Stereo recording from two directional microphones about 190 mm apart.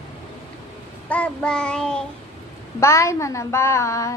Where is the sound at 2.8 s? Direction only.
15° left (ahead or behind).